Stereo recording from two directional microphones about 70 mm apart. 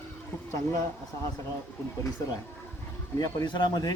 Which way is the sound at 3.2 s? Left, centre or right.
Left.